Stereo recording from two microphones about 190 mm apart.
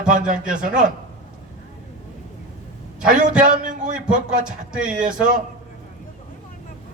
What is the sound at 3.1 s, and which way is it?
Speech, 40° right (ahead or behind).